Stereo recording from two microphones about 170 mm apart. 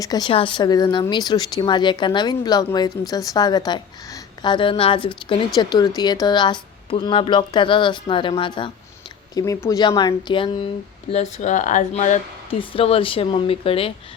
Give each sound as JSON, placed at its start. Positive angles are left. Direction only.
{"t": 0.0, "sound": "speech", "side_deg": 25}
{"t": 11.1, "sound": "speech", "side_deg": 40}
{"t": 12.5, "sound": "speech", "side_deg": 35}